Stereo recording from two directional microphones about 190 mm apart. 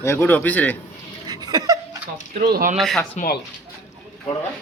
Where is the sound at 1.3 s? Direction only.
20° right (ahead or behind).